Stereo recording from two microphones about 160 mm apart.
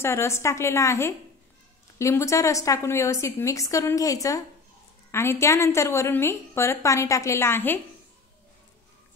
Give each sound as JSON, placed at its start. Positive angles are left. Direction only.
{"t": 0.0, "sound": "a woman's voice", "side_deg": 15}